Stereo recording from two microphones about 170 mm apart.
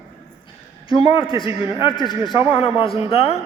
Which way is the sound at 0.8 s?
30° left (ahead or behind).